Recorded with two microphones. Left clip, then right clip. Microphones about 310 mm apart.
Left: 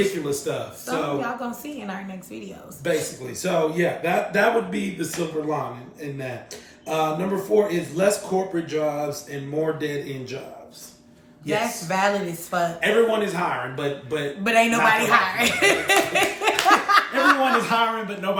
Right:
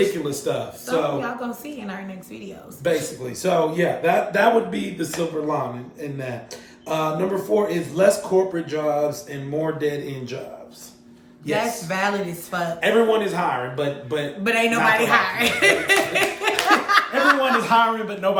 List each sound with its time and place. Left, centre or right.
0.3 s speech: centre
1.2 s a woman's voice: centre
2.8 s speech: centre
11.5 s a woman's voice: centre
12.8 s speech: centre
14.4 s speech: centre
17.6 s speech: centre